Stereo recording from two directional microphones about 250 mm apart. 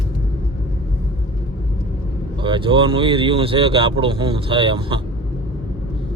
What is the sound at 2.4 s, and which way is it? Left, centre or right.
Speech, centre.